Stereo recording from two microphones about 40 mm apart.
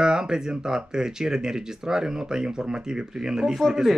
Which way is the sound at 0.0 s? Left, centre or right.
Centre.